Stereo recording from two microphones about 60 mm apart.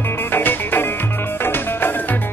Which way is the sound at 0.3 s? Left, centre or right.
Left.